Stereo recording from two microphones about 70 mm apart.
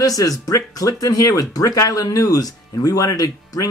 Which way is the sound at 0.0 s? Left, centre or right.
Left.